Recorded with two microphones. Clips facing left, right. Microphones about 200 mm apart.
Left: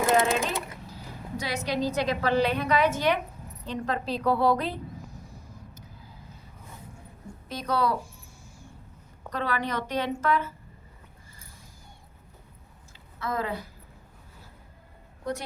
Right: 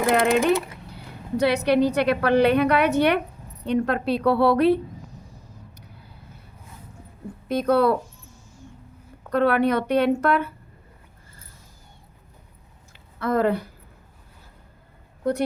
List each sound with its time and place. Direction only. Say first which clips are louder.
0.3 s speech: right 9 dB; 65° right (ahead or behind)
4.9 s a sound: right 1 dB; 10° left (ahead or behind)
5.7 s vehicle: even; 65° right (ahead or behind)
7.4 s speech: right 8 dB; 55° right (ahead or behind)
9.3 s speech: right 10 dB; 60° right (ahead or behind)
13.1 s speech: right 9 dB; 60° right (ahead or behind)
15.2 s speech: right 9 dB; 60° right (ahead or behind)